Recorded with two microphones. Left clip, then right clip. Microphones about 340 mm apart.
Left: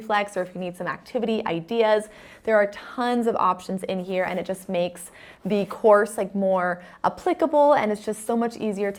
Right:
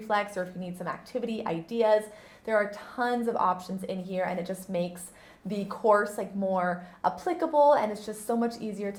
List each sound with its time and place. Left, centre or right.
0.1 s a woman's voice: left